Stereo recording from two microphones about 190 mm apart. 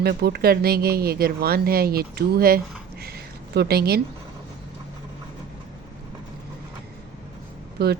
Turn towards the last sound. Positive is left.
turn(degrees=-60)  # may be behind; listen again after turning